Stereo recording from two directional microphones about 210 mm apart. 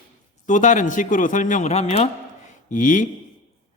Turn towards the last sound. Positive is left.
turn(degrees=40)  # may be behind; listen again after turning